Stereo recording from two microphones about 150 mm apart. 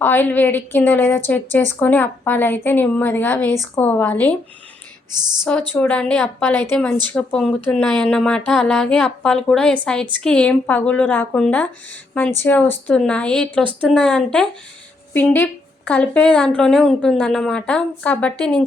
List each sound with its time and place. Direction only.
0.0 s a woman's voice: 15° left (ahead or behind)
5.1 s speech: 30° right (ahead or behind)
5.7 s a woman's voice: 10° left (ahead or behind)